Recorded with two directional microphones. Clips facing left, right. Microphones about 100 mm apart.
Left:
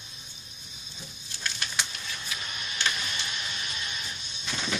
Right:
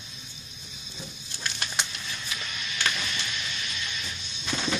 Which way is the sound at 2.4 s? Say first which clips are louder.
Right 1 dB; 40° left (ahead or behind).